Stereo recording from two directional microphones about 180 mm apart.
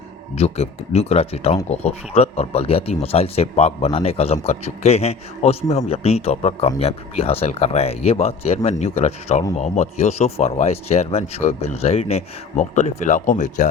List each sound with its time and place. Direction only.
0.3 s speech: 35° left (ahead or behind)